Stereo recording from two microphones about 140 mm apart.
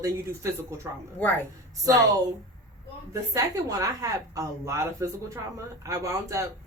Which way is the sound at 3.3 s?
25° right (ahead or behind).